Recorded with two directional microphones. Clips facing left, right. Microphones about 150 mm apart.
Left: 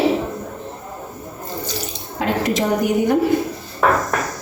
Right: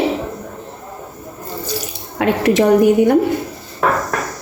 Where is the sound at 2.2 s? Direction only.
65° right (ahead or behind).